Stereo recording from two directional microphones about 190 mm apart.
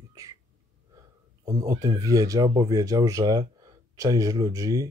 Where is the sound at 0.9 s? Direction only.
20° right (ahead or behind).